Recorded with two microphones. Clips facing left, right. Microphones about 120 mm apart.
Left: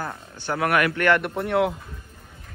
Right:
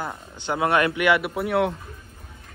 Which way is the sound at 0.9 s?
10° right (ahead or behind).